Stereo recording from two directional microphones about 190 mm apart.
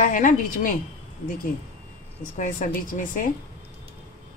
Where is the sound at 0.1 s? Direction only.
45° left (ahead or behind).